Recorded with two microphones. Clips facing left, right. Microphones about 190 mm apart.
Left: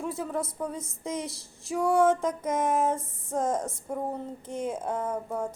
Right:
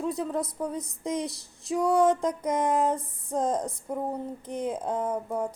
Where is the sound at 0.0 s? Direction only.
15° right (ahead or behind).